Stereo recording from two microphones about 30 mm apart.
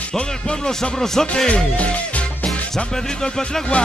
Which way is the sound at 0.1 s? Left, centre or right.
Centre.